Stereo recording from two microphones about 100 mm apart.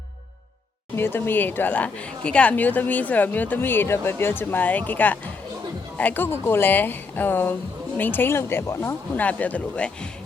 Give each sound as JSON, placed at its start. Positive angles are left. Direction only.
{"t": 0.9, "sound": "speech", "side_deg": 20}